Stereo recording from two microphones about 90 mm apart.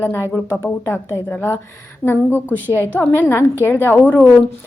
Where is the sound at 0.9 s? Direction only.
25° left (ahead or behind).